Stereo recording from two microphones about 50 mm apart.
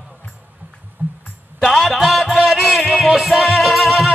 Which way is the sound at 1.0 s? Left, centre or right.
Right.